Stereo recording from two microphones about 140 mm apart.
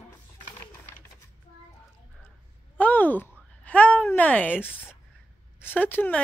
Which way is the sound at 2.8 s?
10° left (ahead or behind).